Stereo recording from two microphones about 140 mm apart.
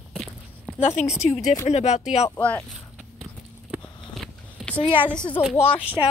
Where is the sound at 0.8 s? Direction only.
55° left (ahead or behind).